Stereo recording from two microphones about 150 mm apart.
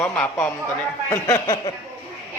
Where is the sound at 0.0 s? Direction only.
15° left (ahead or behind).